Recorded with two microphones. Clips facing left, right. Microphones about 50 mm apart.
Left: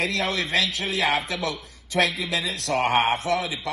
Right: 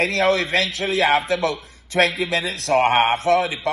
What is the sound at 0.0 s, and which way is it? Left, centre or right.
A man's voice, right.